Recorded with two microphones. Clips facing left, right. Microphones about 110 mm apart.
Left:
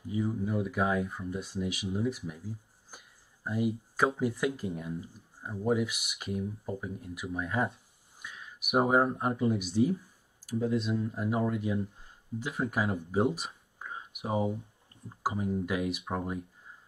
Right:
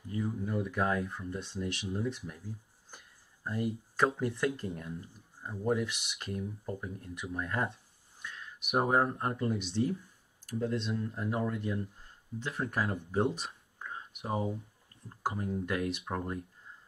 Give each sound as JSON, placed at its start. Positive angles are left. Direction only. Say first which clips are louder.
{"t": 0.1, "sound": "speech", "louder": "left 3 dB", "side_deg": 10}